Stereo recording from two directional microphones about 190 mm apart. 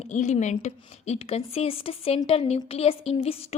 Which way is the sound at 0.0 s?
35° left (ahead or behind).